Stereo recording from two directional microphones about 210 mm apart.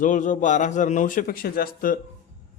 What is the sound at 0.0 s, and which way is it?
A man's voice, 35° left (ahead or behind).